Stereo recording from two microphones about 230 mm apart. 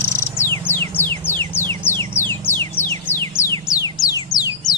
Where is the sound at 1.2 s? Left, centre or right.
Centre.